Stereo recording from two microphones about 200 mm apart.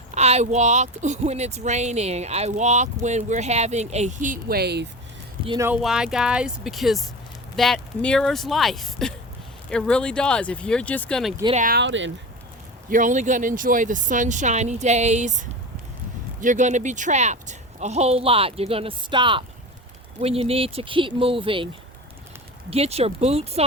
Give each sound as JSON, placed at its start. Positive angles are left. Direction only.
{"t": 0.1, "sound": "speech", "side_deg": -35}
{"t": 5.5, "sound": "speech", "side_deg": -15}
{"t": 5.7, "sound": "speech", "side_deg": -5}
{"t": 11.5, "sound": "speech", "side_deg": -45}
{"t": 11.8, "sound": "speech", "side_deg": -70}
{"t": 12.9, "sound": "speech", "side_deg": -40}
{"t": 22.7, "sound": "speech", "side_deg": -30}